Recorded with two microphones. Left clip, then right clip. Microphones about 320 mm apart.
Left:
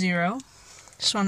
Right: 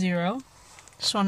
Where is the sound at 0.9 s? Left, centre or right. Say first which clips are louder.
Left 1 dB; centre.